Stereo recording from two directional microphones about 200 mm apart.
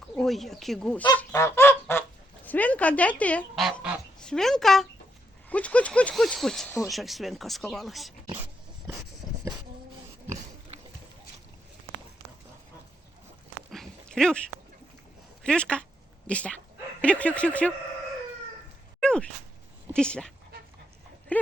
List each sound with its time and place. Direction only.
0.2 s speech: centre (ahead or behind)
1.1 s goose: 15° left (ahead or behind)
5.5 s speech: 5° left (ahead or behind)
13.7 s dog: centre (ahead or behind)
15.4 s a sound: 5° left (ahead or behind)
17.0 s speech: 5° left (ahead or behind)
18.9 s a sound: 5° left (ahead or behind)
19.9 s speech: 5° left (ahead or behind)